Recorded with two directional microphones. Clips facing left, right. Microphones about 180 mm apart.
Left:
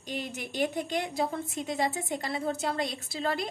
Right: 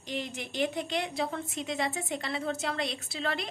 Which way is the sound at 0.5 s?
45° left (ahead or behind).